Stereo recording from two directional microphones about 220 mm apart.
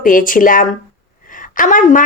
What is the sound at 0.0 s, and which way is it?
Speech, 40° left (ahead or behind).